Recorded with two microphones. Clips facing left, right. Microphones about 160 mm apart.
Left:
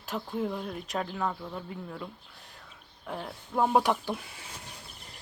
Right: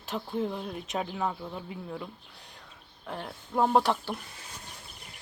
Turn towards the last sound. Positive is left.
turn(degrees=10)  # may be behind; listen again after turning